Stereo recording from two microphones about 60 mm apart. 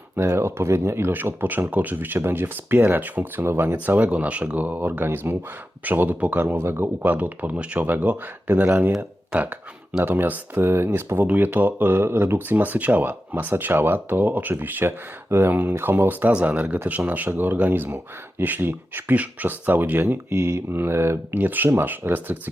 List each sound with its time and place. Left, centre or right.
0.2 s speech: right
3.4 s speech: right
3.9 s speech: right
5.8 s speech: right
6.4 s speech: right
10.6 s speech: right
20.3 s speech: right
20.7 s speech: right
21.3 s speech: right